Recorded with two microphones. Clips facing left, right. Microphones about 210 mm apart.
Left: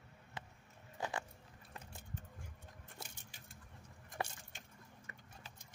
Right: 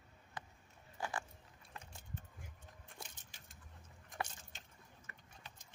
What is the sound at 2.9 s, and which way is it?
Keys jangling, 10° left (ahead or behind).